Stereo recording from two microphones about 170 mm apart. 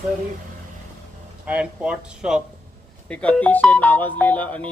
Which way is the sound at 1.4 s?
5° right (ahead or behind).